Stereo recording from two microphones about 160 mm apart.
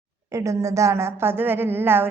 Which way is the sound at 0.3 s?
20° right (ahead or behind).